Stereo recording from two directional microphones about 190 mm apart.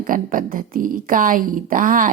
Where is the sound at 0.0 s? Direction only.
45° right (ahead or behind).